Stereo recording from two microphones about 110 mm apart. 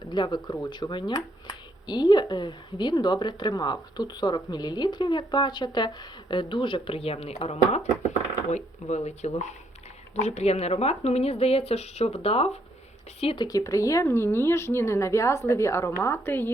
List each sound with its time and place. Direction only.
0.1 s speech: 40° left (ahead or behind); by 7.3 s 65° left (ahead or behind)
7.4 s speech: 80° left
13.3 s speech: 40° left (ahead or behind); by 16.5 s 20° left (ahead or behind)